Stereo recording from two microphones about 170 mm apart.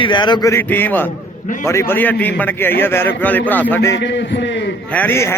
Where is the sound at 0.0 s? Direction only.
25° left (ahead or behind).